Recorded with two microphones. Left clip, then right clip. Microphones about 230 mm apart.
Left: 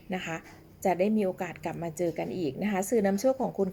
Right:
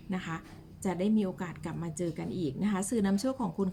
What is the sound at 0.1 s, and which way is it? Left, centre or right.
A woman's voice, right.